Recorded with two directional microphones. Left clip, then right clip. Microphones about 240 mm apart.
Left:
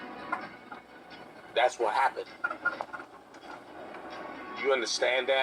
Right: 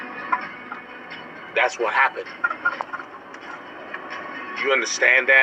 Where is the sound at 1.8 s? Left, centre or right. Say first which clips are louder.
Right 7 dB; right.